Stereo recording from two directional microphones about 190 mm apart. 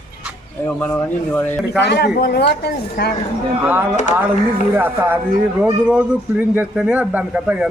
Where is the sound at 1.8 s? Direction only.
60° left (ahead or behind).